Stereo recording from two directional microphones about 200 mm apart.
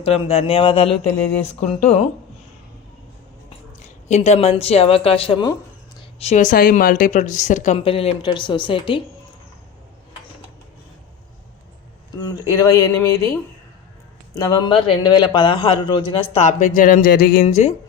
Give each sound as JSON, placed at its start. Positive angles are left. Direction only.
{"t": 0.0, "sound": "a man's voice", "side_deg": 30}
{"t": 4.1, "sound": "a man's voice", "side_deg": 35}
{"t": 12.1, "sound": "a man's voice", "side_deg": 15}
{"t": 17.4, "sound": "a woman's voice", "side_deg": 35}